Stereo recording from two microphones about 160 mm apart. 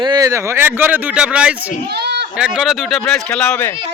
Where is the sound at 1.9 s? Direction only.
90° right.